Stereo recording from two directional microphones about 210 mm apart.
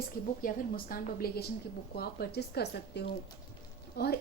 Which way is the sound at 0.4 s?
45° left (ahead or behind).